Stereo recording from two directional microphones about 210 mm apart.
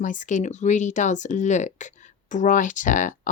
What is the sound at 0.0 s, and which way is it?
Speech, 35° left (ahead or behind).